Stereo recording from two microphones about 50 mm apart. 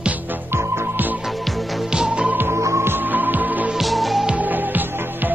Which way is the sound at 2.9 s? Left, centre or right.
Right.